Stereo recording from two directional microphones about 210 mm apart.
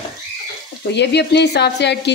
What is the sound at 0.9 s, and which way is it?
Speech, 55° left (ahead or behind).